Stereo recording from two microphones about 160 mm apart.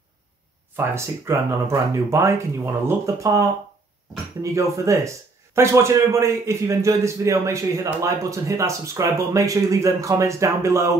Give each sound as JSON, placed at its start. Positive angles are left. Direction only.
{"t": 0.7, "sound": "speech", "side_deg": -15}